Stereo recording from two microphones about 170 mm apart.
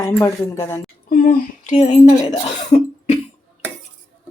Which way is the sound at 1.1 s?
55° left (ahead or behind).